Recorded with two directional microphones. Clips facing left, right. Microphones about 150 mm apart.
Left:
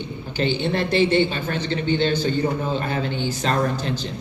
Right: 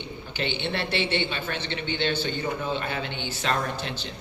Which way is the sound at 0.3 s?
40° left (ahead or behind).